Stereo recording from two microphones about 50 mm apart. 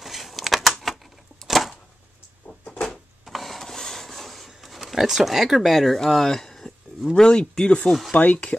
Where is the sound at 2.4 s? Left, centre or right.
Left.